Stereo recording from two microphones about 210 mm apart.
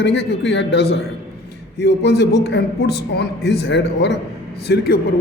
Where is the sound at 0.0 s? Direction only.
55° left (ahead or behind).